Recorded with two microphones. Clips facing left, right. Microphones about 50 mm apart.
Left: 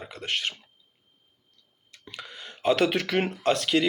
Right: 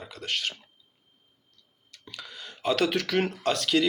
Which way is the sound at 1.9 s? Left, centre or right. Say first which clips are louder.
Left 1 dB; left.